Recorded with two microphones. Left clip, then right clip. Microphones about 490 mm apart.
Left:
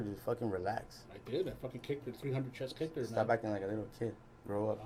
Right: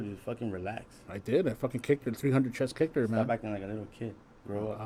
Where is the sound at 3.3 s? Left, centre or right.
Right.